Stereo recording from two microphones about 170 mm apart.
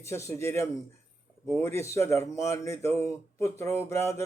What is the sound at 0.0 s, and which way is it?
Speech, 15° left (ahead or behind).